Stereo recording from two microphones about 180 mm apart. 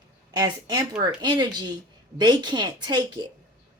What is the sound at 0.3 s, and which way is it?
A woman's voice, 20° right (ahead or behind).